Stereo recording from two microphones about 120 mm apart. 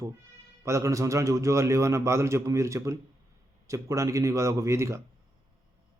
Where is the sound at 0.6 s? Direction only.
25° right (ahead or behind).